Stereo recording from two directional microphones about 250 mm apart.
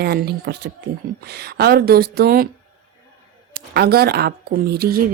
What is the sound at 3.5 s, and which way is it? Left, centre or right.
A woman's voice, right.